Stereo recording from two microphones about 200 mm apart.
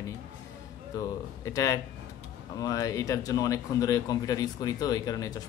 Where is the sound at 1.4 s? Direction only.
15° left (ahead or behind).